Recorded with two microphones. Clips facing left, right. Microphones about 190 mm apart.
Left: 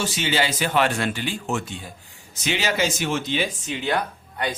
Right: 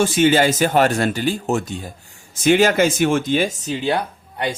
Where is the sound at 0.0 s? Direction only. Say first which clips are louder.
Right 9 dB; 50° right (ahead or behind).